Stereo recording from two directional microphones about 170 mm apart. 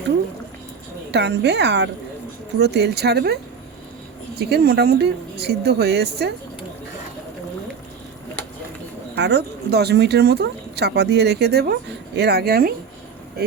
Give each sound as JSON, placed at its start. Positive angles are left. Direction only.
{"t": 1.1, "sound": "a woman's voice", "side_deg": -85}
{"t": 2.6, "sound": "speech", "side_deg": -80}
{"t": 4.4, "sound": "speech", "side_deg": -70}
{"t": 9.1, "sound": "speech", "side_deg": -80}